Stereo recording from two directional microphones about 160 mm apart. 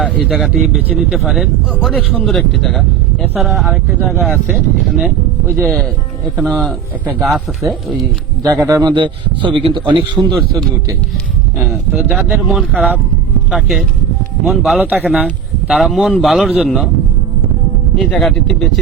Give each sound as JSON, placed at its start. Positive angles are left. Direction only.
{"t": 0.2, "sound": "speech", "side_deg": 0}
{"t": 8.4, "sound": "a man's voice", "side_deg": -20}
{"t": 11.5, "sound": "speech", "side_deg": -10}
{"t": 18.0, "sound": "speech", "side_deg": 0}